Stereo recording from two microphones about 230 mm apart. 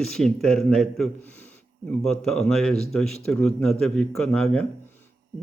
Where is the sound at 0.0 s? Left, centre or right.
Centre.